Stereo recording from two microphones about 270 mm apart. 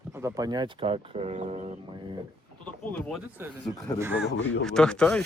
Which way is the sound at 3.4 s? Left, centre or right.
Centre.